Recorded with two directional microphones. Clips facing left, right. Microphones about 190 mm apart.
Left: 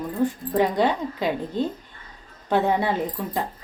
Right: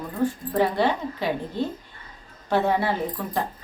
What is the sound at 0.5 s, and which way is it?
Speech, 15° left (ahead or behind).